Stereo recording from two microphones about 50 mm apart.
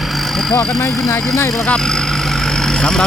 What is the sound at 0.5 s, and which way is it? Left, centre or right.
Speech, left.